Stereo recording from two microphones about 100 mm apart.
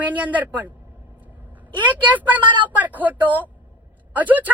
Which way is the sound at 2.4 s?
50° right (ahead or behind).